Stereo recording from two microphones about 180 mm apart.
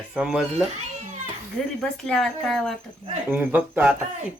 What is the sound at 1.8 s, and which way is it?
Speech, 5° left (ahead or behind).